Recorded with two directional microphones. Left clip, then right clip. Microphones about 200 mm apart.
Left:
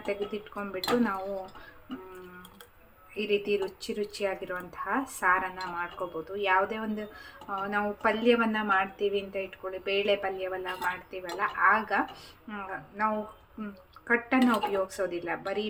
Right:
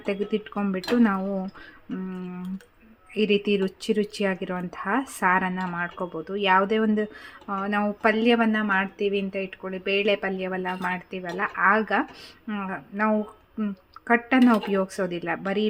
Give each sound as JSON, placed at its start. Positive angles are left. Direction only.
{"t": 0.0, "sound": "speech", "side_deg": -55}
{"t": 3.2, "sound": "a woman's voice", "side_deg": -60}